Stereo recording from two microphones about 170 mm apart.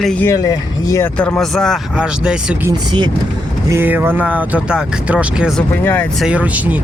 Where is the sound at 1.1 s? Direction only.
5° left (ahead or behind).